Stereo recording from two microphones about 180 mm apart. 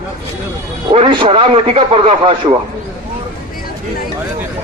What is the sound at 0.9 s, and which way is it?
A man's voice, 25° right (ahead or behind).